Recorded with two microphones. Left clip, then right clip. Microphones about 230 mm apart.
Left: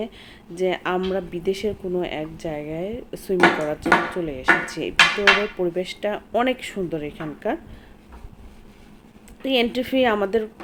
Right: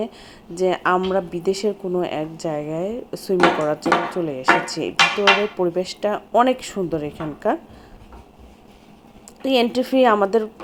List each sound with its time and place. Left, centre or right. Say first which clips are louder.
0.6 s speech: right 4 dB; centre
9.4 s speech: right 3 dB; centre